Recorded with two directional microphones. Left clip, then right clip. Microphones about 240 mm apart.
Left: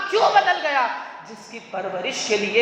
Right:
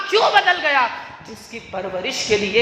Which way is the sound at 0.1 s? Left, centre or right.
Right.